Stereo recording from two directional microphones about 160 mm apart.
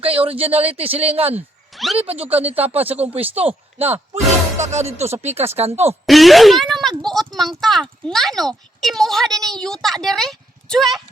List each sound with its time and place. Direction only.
0.3 s speech: 35° right (ahead or behind)
1.7 s speech: centre (ahead or behind)
2.0 s speech: 35° right (ahead or behind)
6.1 s speech: centre (ahead or behind)